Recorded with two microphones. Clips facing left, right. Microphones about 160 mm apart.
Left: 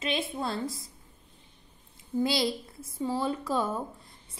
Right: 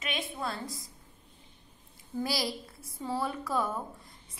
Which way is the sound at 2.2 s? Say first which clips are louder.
Left 5 dB; 25° left (ahead or behind).